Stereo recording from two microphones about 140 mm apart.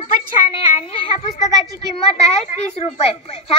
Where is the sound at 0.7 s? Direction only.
40° left (ahead or behind).